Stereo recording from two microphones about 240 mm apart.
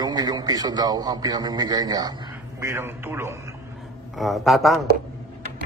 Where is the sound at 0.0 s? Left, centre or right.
Centre.